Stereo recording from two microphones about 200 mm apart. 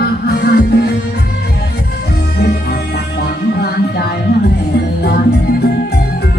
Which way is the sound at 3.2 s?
55° left (ahead or behind).